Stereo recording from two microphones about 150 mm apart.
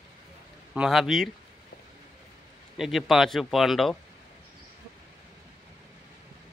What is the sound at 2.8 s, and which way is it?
Speech, centre (ahead or behind).